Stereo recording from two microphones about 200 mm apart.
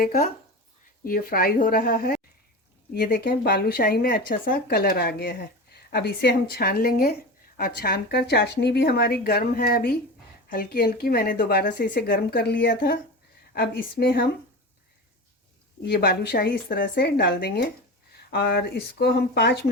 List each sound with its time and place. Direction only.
0.0 s speech: 45° left (ahead or behind)
15.8 s speech: 50° left (ahead or behind)